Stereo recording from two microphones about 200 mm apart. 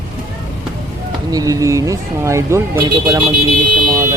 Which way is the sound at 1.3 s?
15° right (ahead or behind).